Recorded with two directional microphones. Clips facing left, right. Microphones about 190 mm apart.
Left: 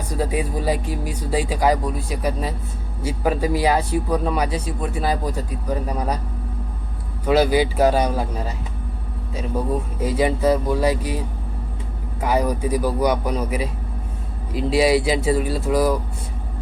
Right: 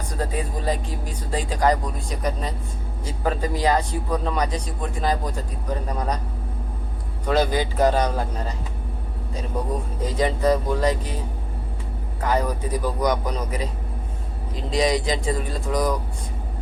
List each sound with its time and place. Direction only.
0.1 s speech: 10° left (ahead or behind)
7.3 s speech: 10° left (ahead or behind)
10.0 s speech: 10° left (ahead or behind)
12.2 s speech: 10° left (ahead or behind)